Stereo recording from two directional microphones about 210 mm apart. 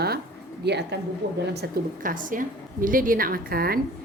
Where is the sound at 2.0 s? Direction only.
40° right (ahead or behind).